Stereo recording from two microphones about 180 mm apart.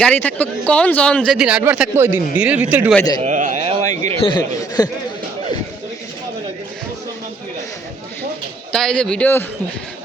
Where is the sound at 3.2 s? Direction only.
45° right (ahead or behind).